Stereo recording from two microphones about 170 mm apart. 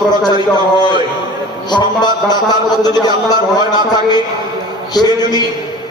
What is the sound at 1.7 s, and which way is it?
A man's voice, 25° left (ahead or behind).